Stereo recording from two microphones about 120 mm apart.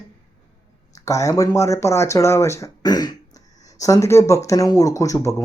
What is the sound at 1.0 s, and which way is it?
Speech, 25° left (ahead or behind).